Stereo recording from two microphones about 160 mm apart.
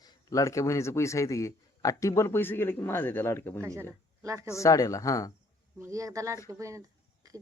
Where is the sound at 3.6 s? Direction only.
20° right (ahead or behind).